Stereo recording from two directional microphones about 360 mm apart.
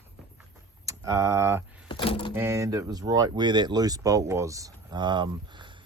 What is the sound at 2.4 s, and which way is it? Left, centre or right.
Speech, centre.